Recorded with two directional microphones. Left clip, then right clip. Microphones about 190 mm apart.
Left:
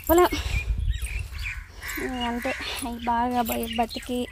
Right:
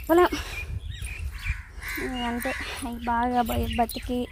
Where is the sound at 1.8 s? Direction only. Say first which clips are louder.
Right 3 dB; 35° right (ahead or behind).